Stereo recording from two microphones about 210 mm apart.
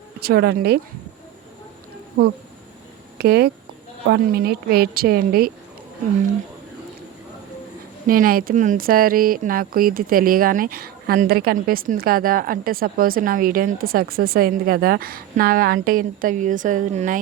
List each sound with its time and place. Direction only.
0.2 s speech: 50° right (ahead or behind)
3.2 s speech: 50° right (ahead or behind)
8.0 s speech: 40° right (ahead or behind)